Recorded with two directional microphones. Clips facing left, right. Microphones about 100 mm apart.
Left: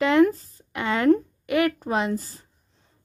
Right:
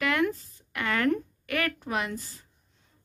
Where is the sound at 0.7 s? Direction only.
20° left (ahead or behind).